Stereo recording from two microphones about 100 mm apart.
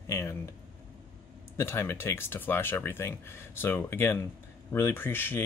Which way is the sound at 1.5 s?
25° left (ahead or behind).